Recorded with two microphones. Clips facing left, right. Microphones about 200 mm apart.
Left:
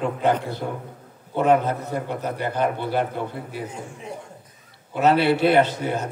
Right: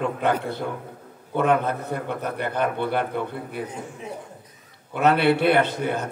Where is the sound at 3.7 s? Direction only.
Centre (ahead or behind).